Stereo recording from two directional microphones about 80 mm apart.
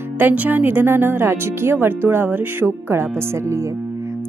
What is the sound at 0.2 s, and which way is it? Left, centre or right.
Speech, right.